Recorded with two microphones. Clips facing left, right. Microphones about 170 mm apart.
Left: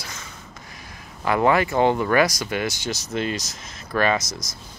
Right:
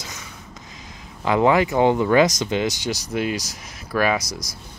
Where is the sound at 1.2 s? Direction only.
15° right (ahead or behind).